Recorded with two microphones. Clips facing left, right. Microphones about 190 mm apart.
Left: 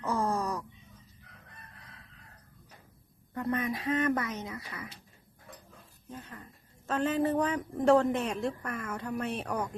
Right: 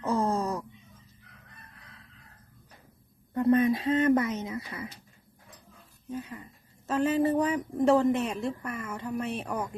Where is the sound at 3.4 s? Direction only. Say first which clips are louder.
Right 9 dB; 30° right (ahead or behind).